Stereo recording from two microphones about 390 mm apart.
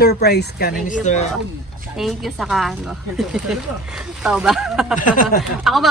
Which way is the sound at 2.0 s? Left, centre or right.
Centre.